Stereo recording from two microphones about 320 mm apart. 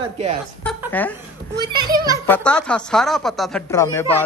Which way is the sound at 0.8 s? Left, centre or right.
Centre.